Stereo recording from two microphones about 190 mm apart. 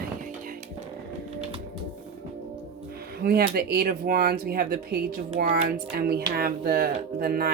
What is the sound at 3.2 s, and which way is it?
Speech, 55° right (ahead or behind).